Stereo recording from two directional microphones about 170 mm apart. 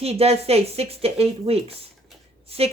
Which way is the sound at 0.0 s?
35° right (ahead or behind).